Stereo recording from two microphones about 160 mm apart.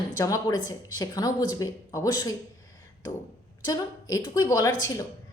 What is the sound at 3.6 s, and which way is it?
A woman's voice, 20° left (ahead or behind).